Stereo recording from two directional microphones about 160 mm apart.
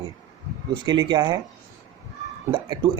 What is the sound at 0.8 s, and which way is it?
Speech, 25° right (ahead or behind).